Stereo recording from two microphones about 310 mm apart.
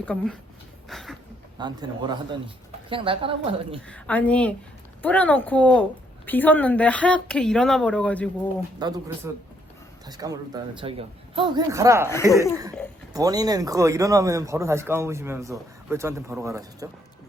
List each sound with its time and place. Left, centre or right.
0.0 s speech: centre
0.9 s a sound: centre
1.5 s a man's voice: centre
3.8 s speech: centre
8.8 s a man's voice: centre
12.3 s speech: centre
13.1 s a man's voice: centre